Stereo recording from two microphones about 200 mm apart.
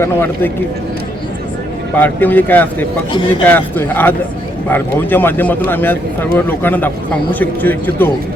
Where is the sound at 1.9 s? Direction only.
10° left (ahead or behind).